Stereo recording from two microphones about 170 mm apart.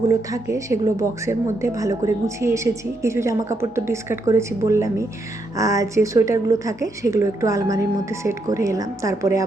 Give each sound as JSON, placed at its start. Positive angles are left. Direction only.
{"t": 0.1, "sound": "a woman's voice", "side_deg": -20}